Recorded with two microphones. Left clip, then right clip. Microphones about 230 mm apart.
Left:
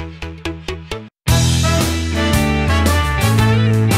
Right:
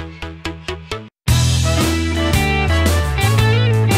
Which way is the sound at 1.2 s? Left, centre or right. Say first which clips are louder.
Left 2 dB; centre.